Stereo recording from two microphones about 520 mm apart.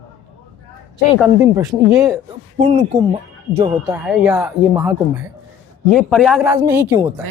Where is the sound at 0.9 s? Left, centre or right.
Centre.